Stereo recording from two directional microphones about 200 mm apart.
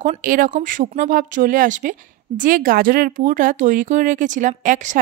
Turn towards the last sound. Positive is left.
turn(degrees=-40)  # may be behind; listen again after turning